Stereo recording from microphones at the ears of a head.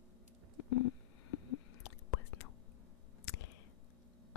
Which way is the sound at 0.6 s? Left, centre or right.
Left.